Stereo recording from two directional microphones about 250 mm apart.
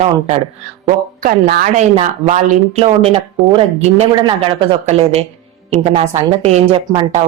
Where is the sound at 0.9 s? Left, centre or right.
Right.